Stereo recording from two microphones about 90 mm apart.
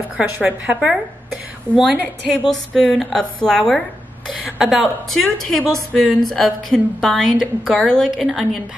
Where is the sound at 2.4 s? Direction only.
5° left (ahead or behind).